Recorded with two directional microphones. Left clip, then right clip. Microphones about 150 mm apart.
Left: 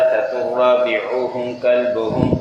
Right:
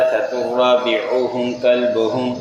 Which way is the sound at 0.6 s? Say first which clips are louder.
Even; 30° right (ahead or behind).